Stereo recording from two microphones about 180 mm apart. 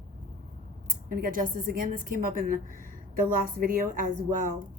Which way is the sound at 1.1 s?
50° right (ahead or behind).